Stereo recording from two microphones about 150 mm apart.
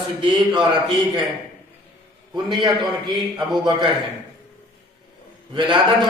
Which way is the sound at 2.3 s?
35° right (ahead or behind).